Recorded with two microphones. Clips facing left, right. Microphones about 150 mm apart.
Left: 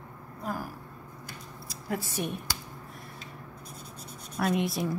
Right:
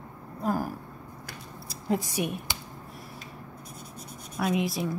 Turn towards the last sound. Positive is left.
turn(degrees=0)  # may be behind; listen again after turning